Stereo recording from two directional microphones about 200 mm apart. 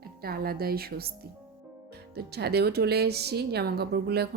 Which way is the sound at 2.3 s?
55° right (ahead or behind).